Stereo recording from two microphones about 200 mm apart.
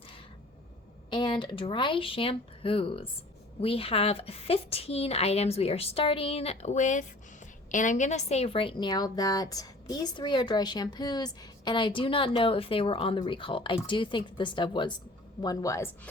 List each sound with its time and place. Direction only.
1.1 s a woman's voice: 25° left (ahead or behind)